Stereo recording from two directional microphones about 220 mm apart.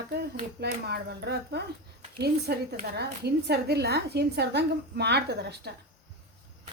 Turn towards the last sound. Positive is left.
turn(degrees=-50)  # may be behind; listen again after turning